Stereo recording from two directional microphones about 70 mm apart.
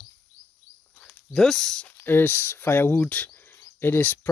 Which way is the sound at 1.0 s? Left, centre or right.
Centre.